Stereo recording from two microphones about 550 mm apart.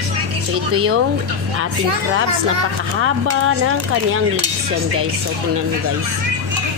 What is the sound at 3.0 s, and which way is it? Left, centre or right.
Speech, right.